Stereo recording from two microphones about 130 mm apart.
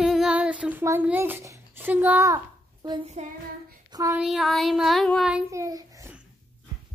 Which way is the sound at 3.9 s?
25° right (ahead or behind).